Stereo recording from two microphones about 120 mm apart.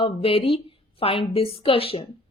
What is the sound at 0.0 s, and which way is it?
A woman's voice, 50° left (ahead or behind).